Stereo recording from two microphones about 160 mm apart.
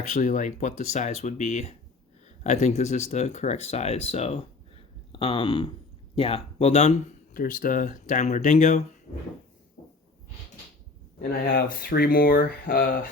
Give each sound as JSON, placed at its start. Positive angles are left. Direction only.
{"t": 0.1, "sound": "speech", "side_deg": 55}
{"t": 7.3, "sound": "speech", "side_deg": 60}
{"t": 11.2, "sound": "speech", "side_deg": 65}